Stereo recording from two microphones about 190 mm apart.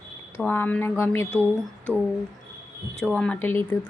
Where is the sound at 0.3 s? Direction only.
10° left (ahead or behind).